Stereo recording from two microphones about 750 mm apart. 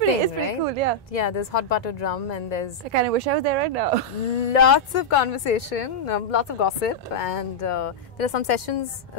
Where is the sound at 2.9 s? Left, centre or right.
Right.